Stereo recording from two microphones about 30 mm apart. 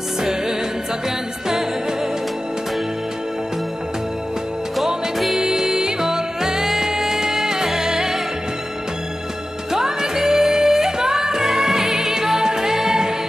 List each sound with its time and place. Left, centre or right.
5.4 s music: centre
9.7 s music: centre